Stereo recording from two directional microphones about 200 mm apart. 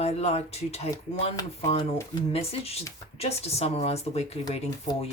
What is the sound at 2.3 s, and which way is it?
Speech, 30° left (ahead or behind).